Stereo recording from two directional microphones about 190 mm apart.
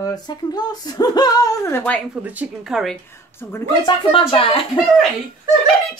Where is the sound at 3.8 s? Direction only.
25° left (ahead or behind).